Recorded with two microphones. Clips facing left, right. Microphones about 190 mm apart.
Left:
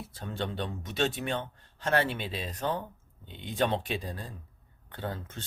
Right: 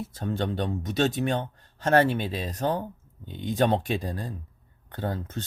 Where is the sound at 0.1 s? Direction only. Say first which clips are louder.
Right 5 dB; 45° right (ahead or behind).